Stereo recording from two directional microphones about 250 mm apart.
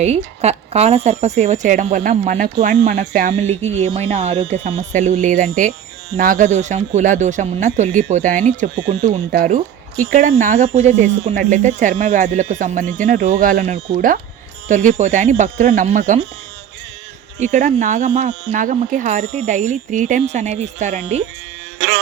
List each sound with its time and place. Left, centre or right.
0.0 s speech: right
17.4 s speech: right